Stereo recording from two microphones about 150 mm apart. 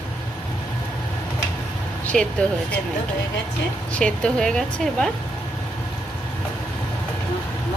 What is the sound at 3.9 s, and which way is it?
Speech, 5° left (ahead or behind).